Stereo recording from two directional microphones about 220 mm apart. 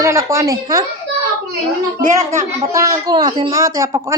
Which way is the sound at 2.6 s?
15° right (ahead or behind).